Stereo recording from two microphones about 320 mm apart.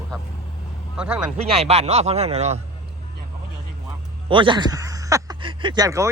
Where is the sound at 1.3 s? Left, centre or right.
Centre.